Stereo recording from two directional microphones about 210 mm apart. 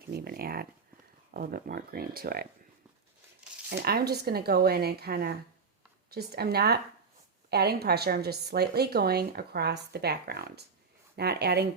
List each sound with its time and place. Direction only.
0.1 s speech: 45° right (ahead or behind)
3.7 s speech: 50° right (ahead or behind)